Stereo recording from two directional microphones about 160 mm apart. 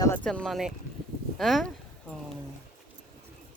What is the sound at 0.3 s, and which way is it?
Speech, 5° left (ahead or behind).